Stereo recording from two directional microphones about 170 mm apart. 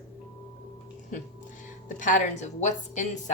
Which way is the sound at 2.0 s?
50° left (ahead or behind).